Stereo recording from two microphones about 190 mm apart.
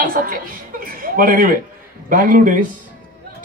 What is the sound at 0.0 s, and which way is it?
A woman's voice, 50° right (ahead or behind).